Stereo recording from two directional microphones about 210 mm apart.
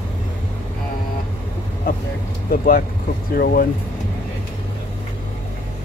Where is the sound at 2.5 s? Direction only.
45° left (ahead or behind).